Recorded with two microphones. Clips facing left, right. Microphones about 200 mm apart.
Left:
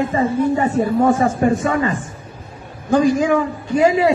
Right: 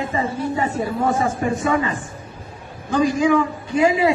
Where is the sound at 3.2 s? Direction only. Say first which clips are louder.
Even; 45° left (ahead or behind).